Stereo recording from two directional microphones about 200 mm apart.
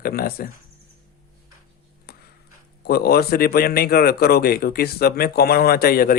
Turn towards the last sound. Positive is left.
turn(degrees=45)  # may be behind; listen again after turning